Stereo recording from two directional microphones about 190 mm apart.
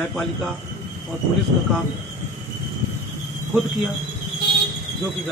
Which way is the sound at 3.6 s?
Centre (ahead or behind).